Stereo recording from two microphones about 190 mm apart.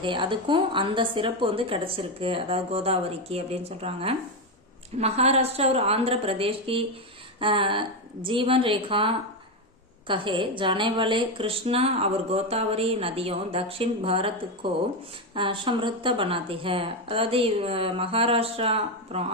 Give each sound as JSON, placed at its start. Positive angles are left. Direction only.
{"t": 0.0, "sound": "a woman's voice", "side_deg": -25}